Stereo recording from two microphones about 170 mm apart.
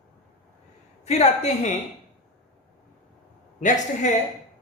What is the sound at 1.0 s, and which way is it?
Speech, 40° left (ahead or behind).